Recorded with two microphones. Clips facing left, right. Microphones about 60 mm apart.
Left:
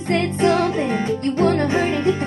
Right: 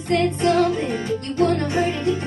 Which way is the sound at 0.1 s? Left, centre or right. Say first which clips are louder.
Left 1 dB; left.